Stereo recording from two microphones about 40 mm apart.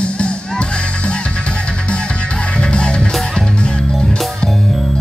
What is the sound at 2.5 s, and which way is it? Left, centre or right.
Music, left.